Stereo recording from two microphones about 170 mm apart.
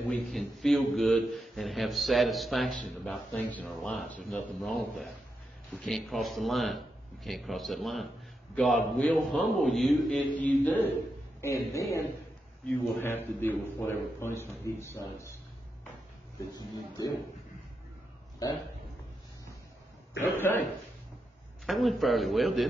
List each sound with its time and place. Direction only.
0.1 s a man's voice: centre (ahead or behind)
16.5 s speech: 25° left (ahead or behind)
20.3 s a man's voice: 10° left (ahead or behind)
21.6 s a man's voice: centre (ahead or behind)